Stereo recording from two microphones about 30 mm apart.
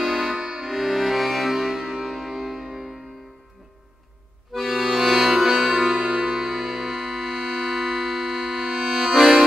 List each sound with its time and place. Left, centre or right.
0.0 s music: centre
0.4 s music: right
0.7 s music: centre
4.5 s accordion: centre
5.1 s music: centre
5.9 s music: right
6.4 s music: centre
7.3 s music: centre
8.5 s music: centre
8.9 s accordion: centre